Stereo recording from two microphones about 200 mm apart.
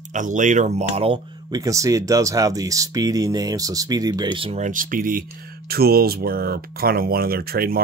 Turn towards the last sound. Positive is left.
turn(degrees=-50)  # may be behind; listen again after turning